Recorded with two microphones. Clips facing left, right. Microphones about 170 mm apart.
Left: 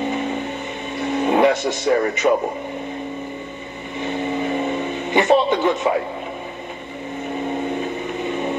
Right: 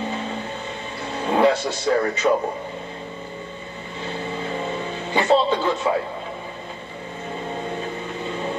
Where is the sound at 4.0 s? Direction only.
20° left (ahead or behind).